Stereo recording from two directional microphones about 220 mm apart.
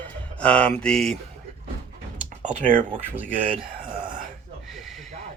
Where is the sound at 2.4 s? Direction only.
40° right (ahead or behind).